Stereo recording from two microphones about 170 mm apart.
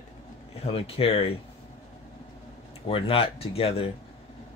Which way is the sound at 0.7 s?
35° left (ahead or behind).